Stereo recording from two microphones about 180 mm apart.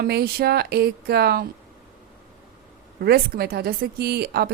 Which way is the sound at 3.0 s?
60° right (ahead or behind).